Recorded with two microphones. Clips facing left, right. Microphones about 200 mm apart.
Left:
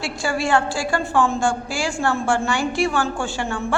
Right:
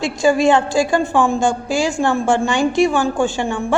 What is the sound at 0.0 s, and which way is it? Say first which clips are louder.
A woman's voice: right 9 dB; 20° right (ahead or behind).